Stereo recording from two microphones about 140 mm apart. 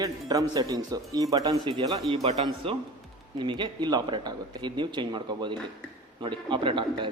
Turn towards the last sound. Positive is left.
turn(degrees=-35)  # may be behind; listen again after turning